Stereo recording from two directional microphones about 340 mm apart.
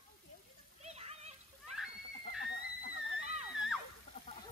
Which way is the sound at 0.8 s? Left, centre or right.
Centre.